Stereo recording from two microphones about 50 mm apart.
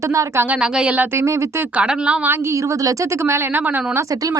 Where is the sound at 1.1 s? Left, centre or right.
Right.